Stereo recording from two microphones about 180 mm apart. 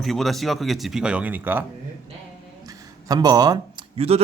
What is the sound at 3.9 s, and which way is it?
Speech, 35° right (ahead or behind).